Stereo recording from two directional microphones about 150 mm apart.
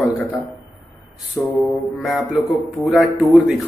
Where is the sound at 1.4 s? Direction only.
25° left (ahead or behind).